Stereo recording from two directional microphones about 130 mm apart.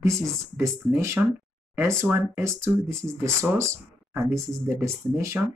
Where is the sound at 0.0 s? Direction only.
25° right (ahead or behind).